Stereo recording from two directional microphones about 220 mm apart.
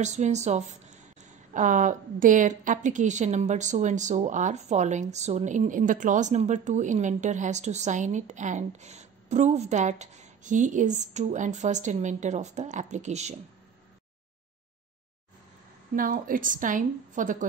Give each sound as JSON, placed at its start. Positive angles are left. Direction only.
{"t": 0.0, "sound": "a woman's voice", "side_deg": -30}
{"t": 16.0, "sound": "a woman's voice", "side_deg": -40}